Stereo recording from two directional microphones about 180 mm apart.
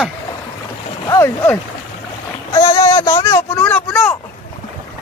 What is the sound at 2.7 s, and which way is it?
Speech, 20° left (ahead or behind).